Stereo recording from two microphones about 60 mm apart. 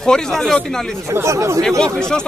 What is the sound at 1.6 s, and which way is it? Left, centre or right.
Speech, centre.